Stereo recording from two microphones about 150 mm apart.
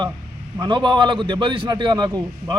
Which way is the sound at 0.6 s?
30° right (ahead or behind).